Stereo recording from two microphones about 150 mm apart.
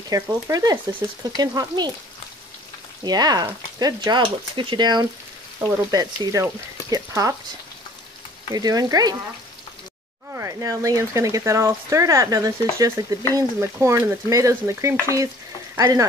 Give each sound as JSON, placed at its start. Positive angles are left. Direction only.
{"t": 0.1, "sound": "speech", "side_deg": -25}
{"t": 3.0, "sound": "speech", "side_deg": -25}
{"t": 8.5, "sound": "speech", "side_deg": -25}
{"t": 10.3, "sound": "speech", "side_deg": -20}
{"t": 15.7, "sound": "frying", "side_deg": -25}